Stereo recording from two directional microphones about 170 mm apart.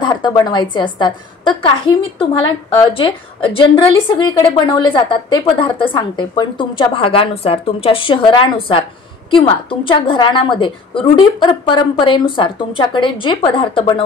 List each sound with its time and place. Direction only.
0.0 s a woman's voice: 25° left (ahead or behind)